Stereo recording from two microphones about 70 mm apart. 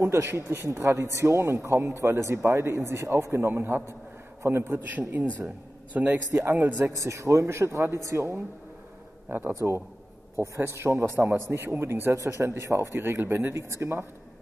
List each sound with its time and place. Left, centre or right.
0.0 s a man's voice: right
4.8 s a man's voice: right
7.0 s speech: right
9.3 s a man's voice: right
10.4 s a man's voice: right